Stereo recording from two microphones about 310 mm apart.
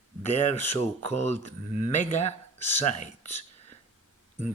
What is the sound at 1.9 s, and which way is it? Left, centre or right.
Speech, left.